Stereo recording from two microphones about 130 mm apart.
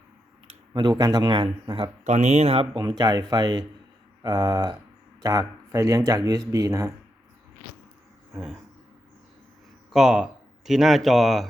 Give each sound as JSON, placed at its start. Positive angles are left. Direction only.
{"t": 0.7, "sound": "speech", "side_deg": -35}
{"t": 2.0, "sound": "speech", "side_deg": -60}
{"t": 2.7, "sound": "speech", "side_deg": -30}
{"t": 9.9, "sound": "speech", "side_deg": -5}